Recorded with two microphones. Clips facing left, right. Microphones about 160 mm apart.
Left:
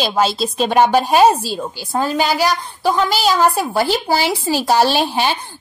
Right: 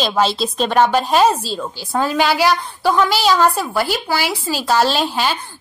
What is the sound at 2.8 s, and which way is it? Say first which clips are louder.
Speech: even; 5° left (ahead or behind).